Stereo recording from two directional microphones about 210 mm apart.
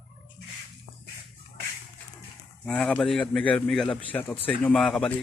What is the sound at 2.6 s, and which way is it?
A man's voice, 5° left (ahead or behind).